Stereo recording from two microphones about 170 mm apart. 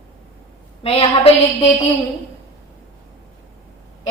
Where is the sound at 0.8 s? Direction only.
35° left (ahead or behind).